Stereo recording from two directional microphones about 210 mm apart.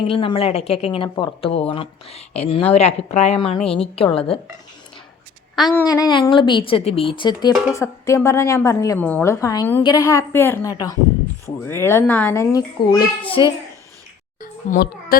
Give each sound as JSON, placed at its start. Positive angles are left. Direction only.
{"t": 0.1, "sound": "speech", "side_deg": 25}
{"t": 5.5, "sound": "speech", "side_deg": 0}
{"t": 5.9, "sound": "a woman's voice", "side_deg": 20}
{"t": 14.4, "sound": "a sound", "side_deg": 45}